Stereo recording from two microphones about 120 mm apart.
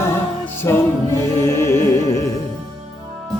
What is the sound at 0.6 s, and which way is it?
Music, 20° left (ahead or behind).